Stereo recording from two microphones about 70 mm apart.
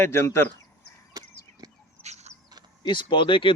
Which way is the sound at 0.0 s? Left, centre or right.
Left.